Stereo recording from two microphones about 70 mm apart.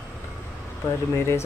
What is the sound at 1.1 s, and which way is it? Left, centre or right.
Speech, left.